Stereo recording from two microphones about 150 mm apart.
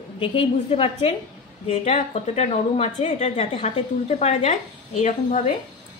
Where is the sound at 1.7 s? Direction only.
50° left (ahead or behind).